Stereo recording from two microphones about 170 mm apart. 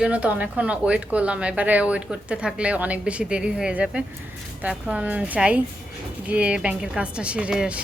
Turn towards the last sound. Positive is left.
turn(degrees=-5)  # may be behind; listen again after turning